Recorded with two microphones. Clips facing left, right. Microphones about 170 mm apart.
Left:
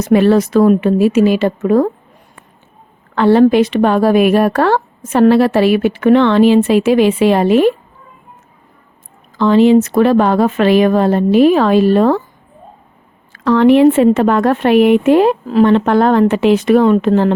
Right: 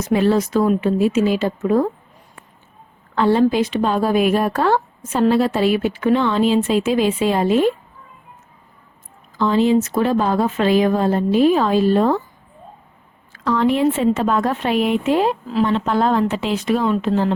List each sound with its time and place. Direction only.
0.0 s a woman's voice: 70° left (ahead or behind)
3.2 s a woman's voice: 70° left (ahead or behind)
9.4 s a woman's voice: 70° left (ahead or behind)
13.3 s a woman's voice: 70° left (ahead or behind)